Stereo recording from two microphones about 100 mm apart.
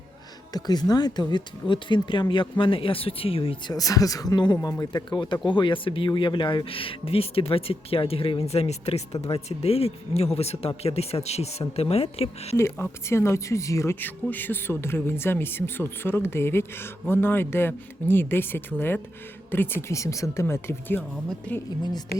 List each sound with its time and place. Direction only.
0.5 s speech: 40° left (ahead or behind); by 3.6 s 65° left (ahead or behind)
3.7 s speech: 35° left (ahead or behind); by 12.5 s 85° left
13.1 s speech: 25° left (ahead or behind)
14.0 s speech: 20° left (ahead or behind)